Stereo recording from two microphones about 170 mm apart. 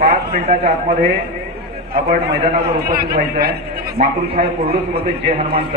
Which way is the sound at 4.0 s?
50° right (ahead or behind).